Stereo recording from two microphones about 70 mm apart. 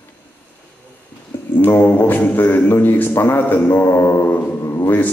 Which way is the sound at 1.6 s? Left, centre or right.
Left.